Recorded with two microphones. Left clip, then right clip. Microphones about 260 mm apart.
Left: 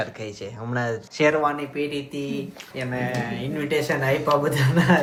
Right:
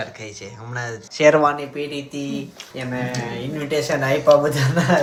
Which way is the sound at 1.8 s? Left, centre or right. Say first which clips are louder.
Even; centre.